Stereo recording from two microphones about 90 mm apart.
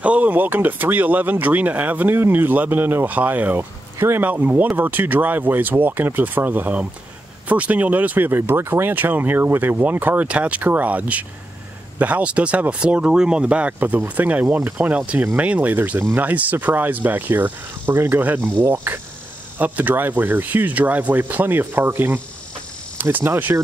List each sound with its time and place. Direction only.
0.0 s speech: 15° right (ahead or behind)